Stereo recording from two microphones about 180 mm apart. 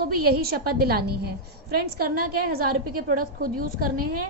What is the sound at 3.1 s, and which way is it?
A woman's voice, 50° right (ahead or behind).